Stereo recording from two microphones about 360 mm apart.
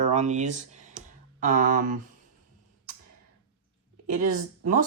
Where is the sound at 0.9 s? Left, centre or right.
Right.